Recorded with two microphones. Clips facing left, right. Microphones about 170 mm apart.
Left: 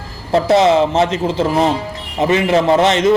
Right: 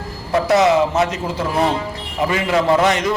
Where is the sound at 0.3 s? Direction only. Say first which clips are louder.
Left 3 dB; 30° left (ahead or behind).